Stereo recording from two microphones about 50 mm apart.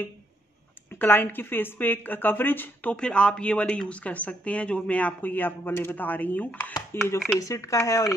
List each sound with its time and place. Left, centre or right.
0.8 s speech: left
2.9 s speech: left
6.9 s speech: left
7.4 s speech: left